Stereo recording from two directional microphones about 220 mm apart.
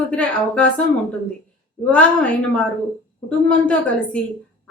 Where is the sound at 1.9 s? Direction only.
5° left (ahead or behind).